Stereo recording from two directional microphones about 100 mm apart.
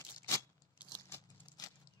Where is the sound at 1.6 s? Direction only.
40° left (ahead or behind).